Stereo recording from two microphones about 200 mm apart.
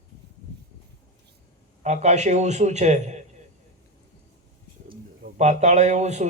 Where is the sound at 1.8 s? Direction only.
35° right (ahead or behind).